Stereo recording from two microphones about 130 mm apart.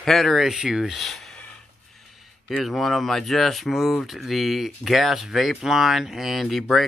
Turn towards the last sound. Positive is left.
turn(degrees=0)  # may be behind; listen again after turning